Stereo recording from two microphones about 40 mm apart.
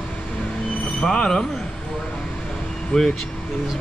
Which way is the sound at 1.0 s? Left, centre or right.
Left.